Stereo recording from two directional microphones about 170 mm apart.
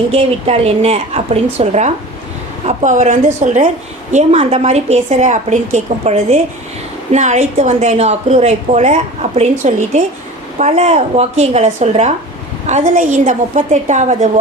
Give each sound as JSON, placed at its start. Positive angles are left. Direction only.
{"t": 0.1, "sound": "a woman's voice", "side_deg": -35}